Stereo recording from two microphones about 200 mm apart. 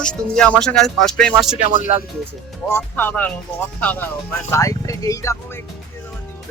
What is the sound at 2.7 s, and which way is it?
Speech, 10° left (ahead or behind).